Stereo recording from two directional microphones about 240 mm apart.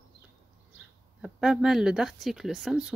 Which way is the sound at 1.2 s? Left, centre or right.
Centre.